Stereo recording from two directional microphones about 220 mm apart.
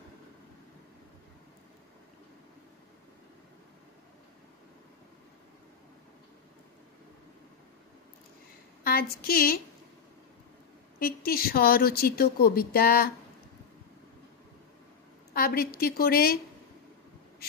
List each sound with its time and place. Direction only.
8.8 s speech: 45° left (ahead or behind)
11.0 s speech: 40° left (ahead or behind)
15.3 s speech: 45° left (ahead or behind)